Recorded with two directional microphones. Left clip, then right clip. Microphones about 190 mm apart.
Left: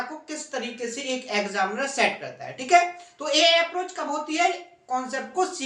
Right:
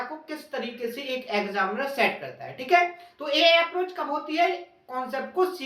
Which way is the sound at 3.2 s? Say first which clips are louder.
Even; 5° left (ahead or behind).